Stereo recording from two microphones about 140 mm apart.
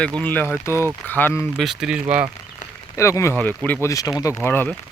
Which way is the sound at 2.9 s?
20° left (ahead or behind).